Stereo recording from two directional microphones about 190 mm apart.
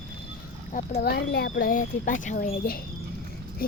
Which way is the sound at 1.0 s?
55° left (ahead or behind).